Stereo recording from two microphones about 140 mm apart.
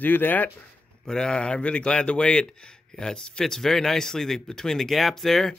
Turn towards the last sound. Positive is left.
turn(degrees=0)  # may be behind; listen again after turning